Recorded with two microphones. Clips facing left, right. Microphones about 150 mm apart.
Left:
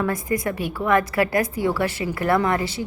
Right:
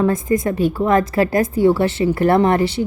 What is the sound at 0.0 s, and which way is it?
A woman's voice, 25° right (ahead or behind).